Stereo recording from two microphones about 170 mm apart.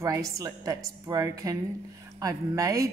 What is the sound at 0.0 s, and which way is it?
Speech, 20° right (ahead or behind).